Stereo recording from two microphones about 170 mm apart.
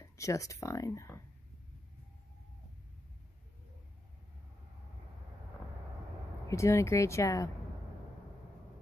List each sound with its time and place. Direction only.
0.0 s speech: 20° left (ahead or behind)
6.5 s speech: 15° left (ahead or behind)